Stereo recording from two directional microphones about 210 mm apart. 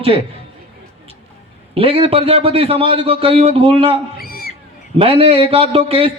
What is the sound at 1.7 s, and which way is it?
A man's voice, 25° right (ahead or behind).